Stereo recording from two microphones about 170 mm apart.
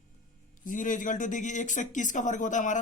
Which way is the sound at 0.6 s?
50° left (ahead or behind).